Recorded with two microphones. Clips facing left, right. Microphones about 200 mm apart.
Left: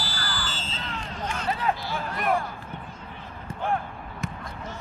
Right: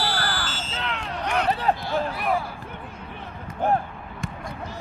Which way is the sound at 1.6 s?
35° right (ahead or behind).